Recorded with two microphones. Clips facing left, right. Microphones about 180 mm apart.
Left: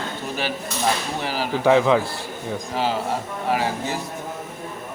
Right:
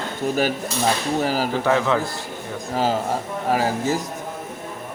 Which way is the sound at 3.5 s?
40° right (ahead or behind).